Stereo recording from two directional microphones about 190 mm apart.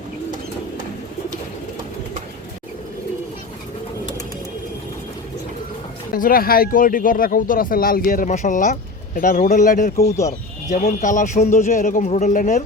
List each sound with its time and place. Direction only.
6.1 s a man's voice: 50° left (ahead or behind)